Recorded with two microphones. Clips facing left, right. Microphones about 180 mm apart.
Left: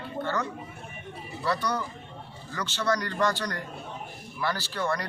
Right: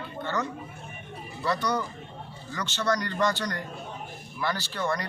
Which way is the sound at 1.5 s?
10° left (ahead or behind).